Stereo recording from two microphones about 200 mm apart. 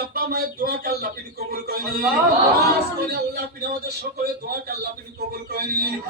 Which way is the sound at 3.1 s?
50° right (ahead or behind).